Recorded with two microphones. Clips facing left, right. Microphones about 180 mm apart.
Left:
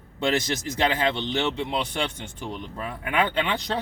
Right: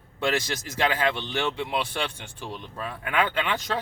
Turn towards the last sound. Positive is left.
turn(degrees=20)  # may be behind; listen again after turning